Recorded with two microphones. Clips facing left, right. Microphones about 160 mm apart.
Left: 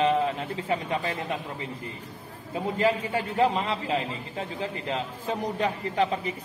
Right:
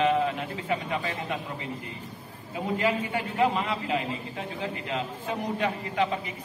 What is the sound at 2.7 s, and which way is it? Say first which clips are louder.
A man's voice: left 2 dB; 35° left (ahead or behind).